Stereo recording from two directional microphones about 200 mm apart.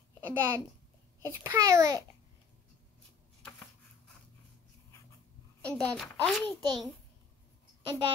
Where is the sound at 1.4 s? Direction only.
15° right (ahead or behind).